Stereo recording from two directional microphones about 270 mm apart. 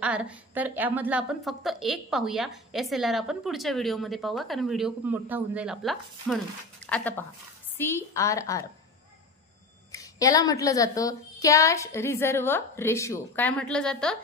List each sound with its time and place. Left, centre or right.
0.0 s a woman's voice: centre
9.9 s a woman's voice: centre